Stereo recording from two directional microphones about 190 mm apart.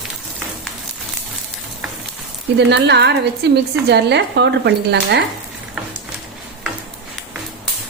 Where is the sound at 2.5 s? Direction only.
65° right (ahead or behind).